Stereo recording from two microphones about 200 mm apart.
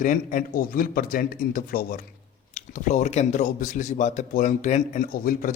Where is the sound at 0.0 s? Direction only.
40° left (ahead or behind).